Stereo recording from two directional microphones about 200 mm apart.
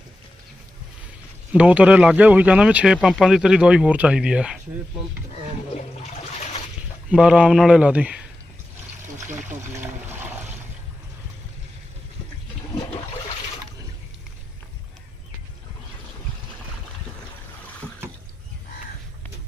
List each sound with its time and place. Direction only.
1.5 s speech: 5° right (ahead or behind)
5.7 s water: 30° left (ahead or behind)
7.1 s speech: 5° right (ahead or behind)
9.6 s a sound: 10° right (ahead or behind)